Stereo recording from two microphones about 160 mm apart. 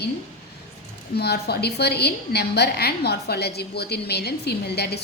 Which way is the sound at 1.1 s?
90° left.